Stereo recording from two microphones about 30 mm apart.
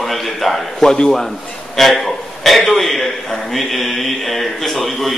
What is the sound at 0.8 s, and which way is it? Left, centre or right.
Speech, centre.